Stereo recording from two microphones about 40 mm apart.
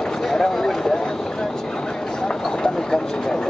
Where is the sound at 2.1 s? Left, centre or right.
Centre.